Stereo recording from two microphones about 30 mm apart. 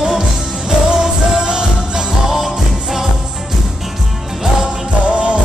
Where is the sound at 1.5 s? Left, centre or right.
Right.